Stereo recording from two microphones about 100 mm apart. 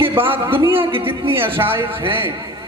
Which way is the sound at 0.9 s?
65° right (ahead or behind).